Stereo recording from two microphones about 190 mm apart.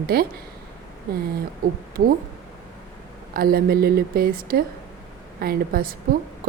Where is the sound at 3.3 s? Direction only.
50° right (ahead or behind).